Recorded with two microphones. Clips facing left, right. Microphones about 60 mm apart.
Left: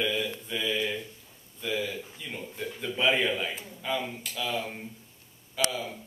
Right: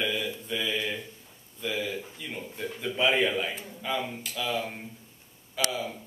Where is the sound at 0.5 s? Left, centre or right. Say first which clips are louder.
Even; centre.